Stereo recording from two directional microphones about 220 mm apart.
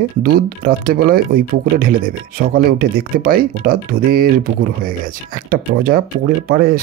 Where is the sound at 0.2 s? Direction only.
40° right (ahead or behind).